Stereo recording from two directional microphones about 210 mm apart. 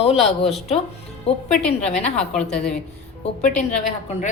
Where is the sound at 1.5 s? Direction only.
5° left (ahead or behind).